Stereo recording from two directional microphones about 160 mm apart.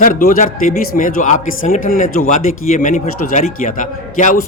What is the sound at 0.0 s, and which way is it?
Speech, 60° left (ahead or behind).